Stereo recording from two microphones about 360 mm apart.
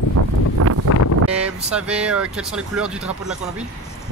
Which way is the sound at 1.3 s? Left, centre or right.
Centre.